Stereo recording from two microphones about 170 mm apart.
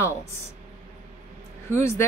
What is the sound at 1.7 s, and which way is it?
Speech, 15° left (ahead or behind).